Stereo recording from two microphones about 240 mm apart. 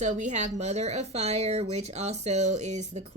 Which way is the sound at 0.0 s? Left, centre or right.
Right.